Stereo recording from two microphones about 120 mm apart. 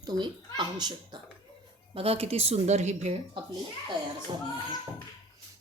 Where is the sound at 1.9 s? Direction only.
55° right (ahead or behind).